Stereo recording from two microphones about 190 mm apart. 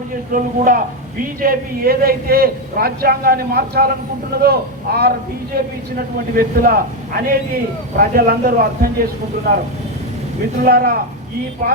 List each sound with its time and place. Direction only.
0.3 s a man's voice: 45° right (ahead or behind)
6.3 s a man's voice: 50° right (ahead or behind)
10.7 s a man's voice: 50° right (ahead or behind)